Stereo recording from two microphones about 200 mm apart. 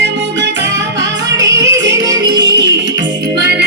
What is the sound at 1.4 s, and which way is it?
Music, 65° right (ahead or behind).